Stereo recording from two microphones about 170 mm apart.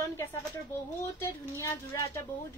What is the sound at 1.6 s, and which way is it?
Speech, 20° left (ahead or behind).